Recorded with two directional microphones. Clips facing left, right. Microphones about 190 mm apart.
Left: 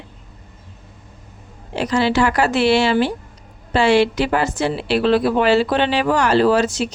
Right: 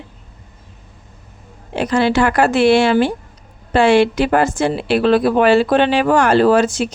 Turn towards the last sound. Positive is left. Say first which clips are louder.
# right 3 dB
turn(degrees=-50)  # may be behind; listen again after turning